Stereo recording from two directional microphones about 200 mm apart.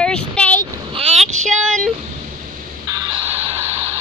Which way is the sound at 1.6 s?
Centre (ahead or behind).